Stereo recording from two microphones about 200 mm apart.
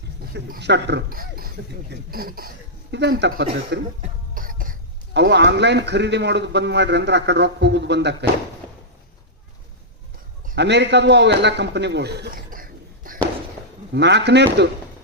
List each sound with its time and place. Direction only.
0.3 s speech: 55° right (ahead or behind)
2.9 s speech: 60° right (ahead or behind)
10.5 s a man's voice: 60° right (ahead or behind)
13.9 s speech: 60° right (ahead or behind)